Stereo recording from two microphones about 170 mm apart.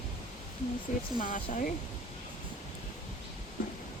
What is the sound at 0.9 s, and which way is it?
Speech, 45° left (ahead or behind).